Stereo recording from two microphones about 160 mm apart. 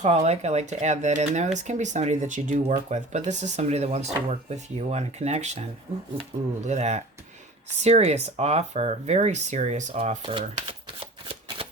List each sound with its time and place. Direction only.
0.0 s speech: 40° right (ahead or behind)